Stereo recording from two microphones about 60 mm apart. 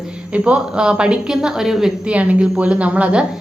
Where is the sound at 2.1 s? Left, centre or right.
Right.